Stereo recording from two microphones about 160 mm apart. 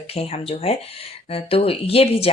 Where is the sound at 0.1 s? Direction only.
40° left (ahead or behind).